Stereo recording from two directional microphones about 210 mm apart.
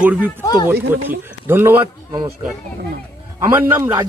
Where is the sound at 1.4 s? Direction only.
10° right (ahead or behind).